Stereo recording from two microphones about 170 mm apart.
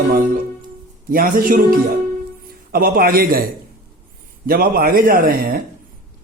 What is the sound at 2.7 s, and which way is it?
Speech, 55° right (ahead or behind).